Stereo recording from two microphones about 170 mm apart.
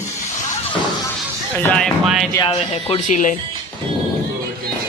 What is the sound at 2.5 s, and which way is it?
Speech, 35° left (ahead or behind).